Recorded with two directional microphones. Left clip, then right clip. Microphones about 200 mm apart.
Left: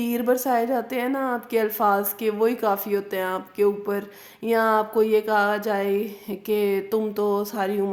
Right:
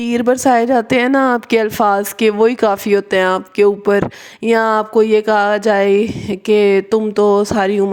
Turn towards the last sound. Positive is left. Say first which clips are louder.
# right 10 dB
turn(degrees=-40)  # may be behind; listen again after turning